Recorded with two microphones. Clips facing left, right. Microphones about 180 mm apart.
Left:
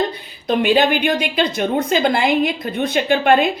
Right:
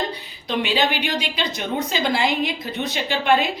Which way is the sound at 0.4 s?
50° left (ahead or behind).